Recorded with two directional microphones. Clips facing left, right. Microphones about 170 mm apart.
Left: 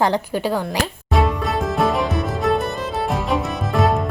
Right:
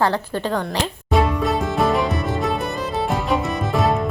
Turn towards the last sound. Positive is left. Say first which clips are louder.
# left 1 dB
turn(degrees=0)  # may be behind; listen again after turning